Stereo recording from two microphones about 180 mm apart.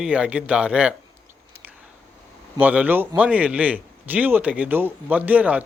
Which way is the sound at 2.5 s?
10° right (ahead or behind).